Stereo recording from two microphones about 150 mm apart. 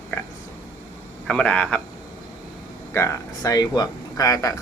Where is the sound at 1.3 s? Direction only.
5° left (ahead or behind).